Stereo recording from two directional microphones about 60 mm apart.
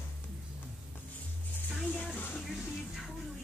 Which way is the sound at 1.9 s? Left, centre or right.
Left.